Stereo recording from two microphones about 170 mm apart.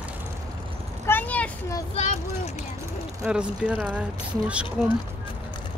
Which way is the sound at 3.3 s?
5° right (ahead or behind).